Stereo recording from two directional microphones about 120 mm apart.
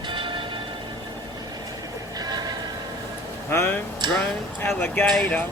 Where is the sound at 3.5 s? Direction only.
20° left (ahead or behind).